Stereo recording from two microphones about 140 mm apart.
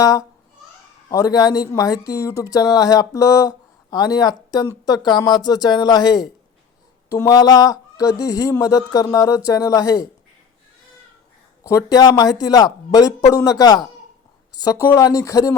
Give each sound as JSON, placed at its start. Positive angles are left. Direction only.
{"t": 0.0, "sound": "speech", "side_deg": 25}
{"t": 11.6, "sound": "speech", "side_deg": 25}